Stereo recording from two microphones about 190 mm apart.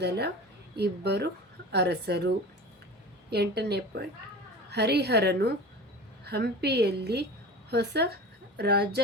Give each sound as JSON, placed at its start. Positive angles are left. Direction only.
{"t": 0.8, "sound": "a woman's voice", "side_deg": -60}